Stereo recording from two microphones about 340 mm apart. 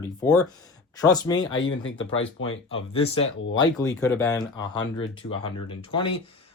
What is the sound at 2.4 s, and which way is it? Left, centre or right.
Speech, left.